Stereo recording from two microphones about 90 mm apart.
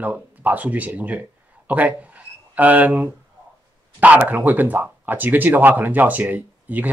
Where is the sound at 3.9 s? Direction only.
15° right (ahead or behind).